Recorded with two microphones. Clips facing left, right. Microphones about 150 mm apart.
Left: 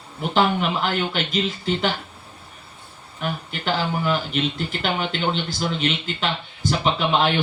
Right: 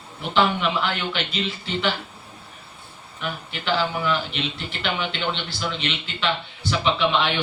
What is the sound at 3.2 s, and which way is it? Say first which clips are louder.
Speech: left 3 dB; 45° left (ahead or behind).